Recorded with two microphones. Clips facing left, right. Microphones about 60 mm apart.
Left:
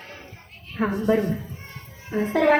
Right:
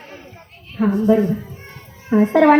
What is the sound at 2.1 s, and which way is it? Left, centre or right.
Speech, right.